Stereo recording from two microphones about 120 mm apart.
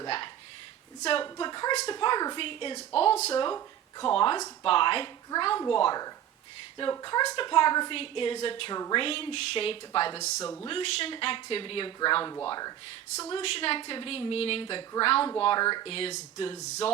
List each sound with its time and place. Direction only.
1.2 s a sound: 35° left (ahead or behind)
1.9 s a woman's voice: 40° left (ahead or behind); by 3.3 s 60° left (ahead or behind)
3.5 s a woman's voice: 40° left (ahead or behind)
10.2 s speech: 70° left (ahead or behind)
10.7 s a woman's voice: 45° left (ahead or behind); by 12.7 s 30° left (ahead or behind)
13.3 s a woman's voice: 50° left (ahead or behind); by 15.9 s 35° left (ahead or behind)
15.9 s a woman's voice: 55° left (ahead or behind)
16.6 s speech: 70° left (ahead or behind)